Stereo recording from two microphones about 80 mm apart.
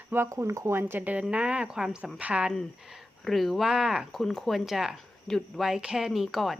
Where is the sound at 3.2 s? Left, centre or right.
Centre.